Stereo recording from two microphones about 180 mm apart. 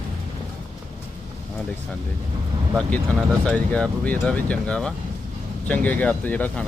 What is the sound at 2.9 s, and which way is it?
Speech, 5° left (ahead or behind).